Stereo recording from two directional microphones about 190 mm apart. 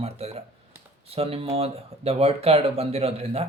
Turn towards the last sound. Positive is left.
turn(degrees=-30)  # may be behind; listen again after turning